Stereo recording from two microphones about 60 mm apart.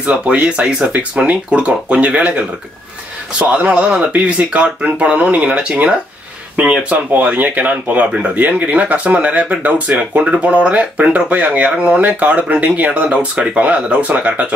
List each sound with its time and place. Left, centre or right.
0.1 s speech: centre
5.7 s speech: centre
7.1 s speech: right